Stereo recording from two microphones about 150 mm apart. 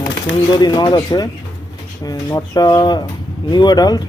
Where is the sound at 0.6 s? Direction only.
30° left (ahead or behind).